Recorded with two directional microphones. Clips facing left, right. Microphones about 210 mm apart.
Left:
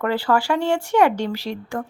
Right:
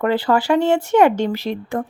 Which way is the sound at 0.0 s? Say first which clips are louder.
Right 3 dB; 20° right (ahead or behind).